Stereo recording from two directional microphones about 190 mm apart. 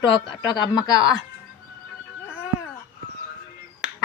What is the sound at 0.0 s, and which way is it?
Speech, 25° left (ahead or behind).